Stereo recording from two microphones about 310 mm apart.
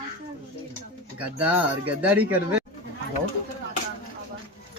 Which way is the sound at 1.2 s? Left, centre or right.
Centre.